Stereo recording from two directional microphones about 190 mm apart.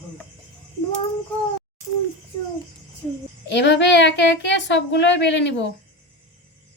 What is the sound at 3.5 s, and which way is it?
Speech, 65° left (ahead or behind).